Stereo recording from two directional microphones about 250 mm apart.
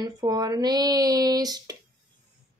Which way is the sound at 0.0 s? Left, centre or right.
Centre.